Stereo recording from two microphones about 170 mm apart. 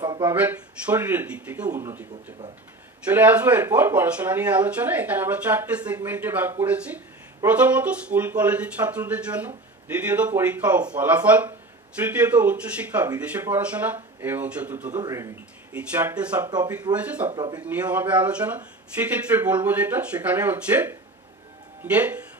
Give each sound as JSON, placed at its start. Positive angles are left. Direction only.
{"t": 0.0, "sound": "a sound", "side_deg": -25}
{"t": 0.3, "sound": "speech", "side_deg": -10}
{"t": 15.0, "sound": "speech", "side_deg": -20}
{"t": 15.7, "sound": "speech", "side_deg": -10}
{"t": 16.4, "sound": "speech", "side_deg": -25}
{"t": 16.9, "sound": "speech", "side_deg": -10}